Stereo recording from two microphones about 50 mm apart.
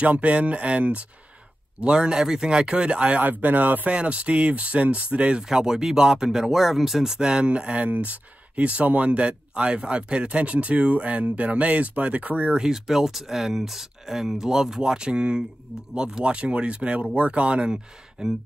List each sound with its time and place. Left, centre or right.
0.0 s speech: right
3.2 s speech: right
3.9 s speech: right
12.5 s speech: centre
18.2 s speech: centre